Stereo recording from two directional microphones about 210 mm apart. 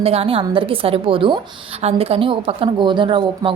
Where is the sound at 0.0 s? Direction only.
30° right (ahead or behind).